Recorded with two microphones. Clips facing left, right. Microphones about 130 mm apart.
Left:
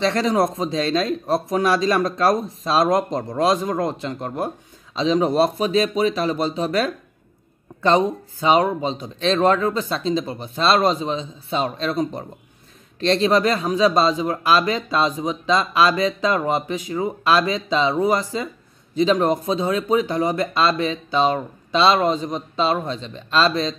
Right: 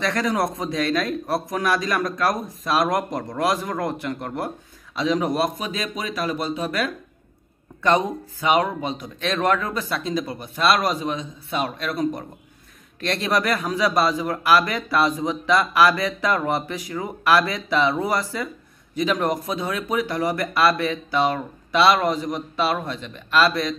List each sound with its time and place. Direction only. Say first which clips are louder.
0.0 s speech: left 4 dB; 25° left (ahead or behind)